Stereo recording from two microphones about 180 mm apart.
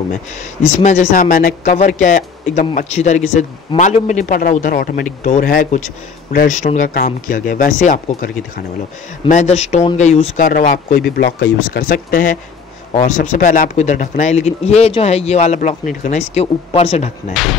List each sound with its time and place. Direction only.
0.4 s a man's voice: 40° left (ahead or behind)
11.1 s speech: 65° left (ahead or behind); by 17.1 s 40° left (ahead or behind)
17.3 s speech: centre (ahead or behind)